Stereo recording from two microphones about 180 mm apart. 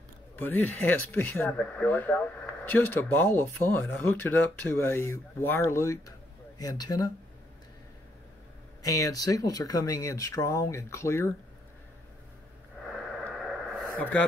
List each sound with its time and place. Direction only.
0.4 s speech: 10° left (ahead or behind)
8.8 s speech: 20° left (ahead or behind)
12.8 s a sound: centre (ahead or behind)